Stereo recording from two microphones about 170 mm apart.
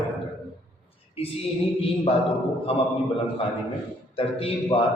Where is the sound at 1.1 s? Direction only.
35° left (ahead or behind).